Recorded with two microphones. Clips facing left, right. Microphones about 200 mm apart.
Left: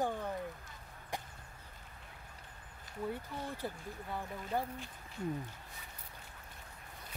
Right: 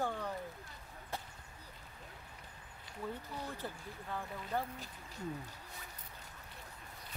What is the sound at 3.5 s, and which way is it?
Speech, 15° left (ahead or behind).